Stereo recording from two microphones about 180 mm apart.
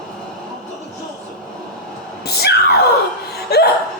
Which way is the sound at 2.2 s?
60° left (ahead or behind).